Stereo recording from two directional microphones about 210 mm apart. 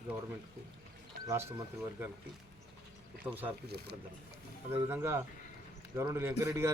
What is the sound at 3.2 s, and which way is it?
Speech, 5° right (ahead or behind).